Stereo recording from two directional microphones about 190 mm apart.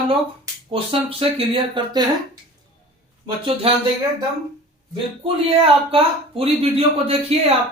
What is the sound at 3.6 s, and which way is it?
Speech, 30° right (ahead or behind).